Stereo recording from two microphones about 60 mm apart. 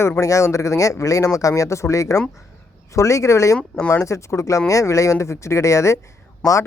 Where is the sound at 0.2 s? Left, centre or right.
Left.